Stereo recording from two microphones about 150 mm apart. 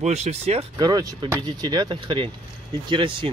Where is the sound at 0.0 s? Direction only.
45° right (ahead or behind).